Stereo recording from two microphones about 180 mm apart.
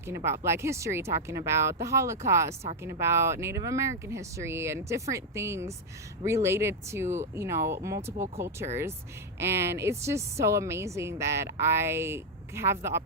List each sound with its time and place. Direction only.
0.0 s a woman's voice: 15° right (ahead or behind)